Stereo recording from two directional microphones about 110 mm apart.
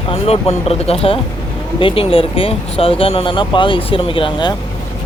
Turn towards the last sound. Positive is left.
turn(degrees=50)  # may be behind; listen again after turning